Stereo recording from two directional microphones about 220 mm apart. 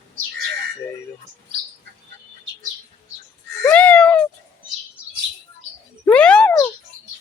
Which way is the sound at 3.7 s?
5° left (ahead or behind).